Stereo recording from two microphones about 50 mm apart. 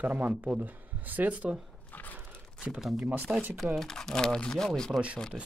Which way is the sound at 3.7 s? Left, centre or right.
Centre.